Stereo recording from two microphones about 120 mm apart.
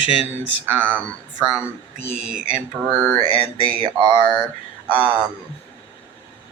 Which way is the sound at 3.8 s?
40° right (ahead or behind).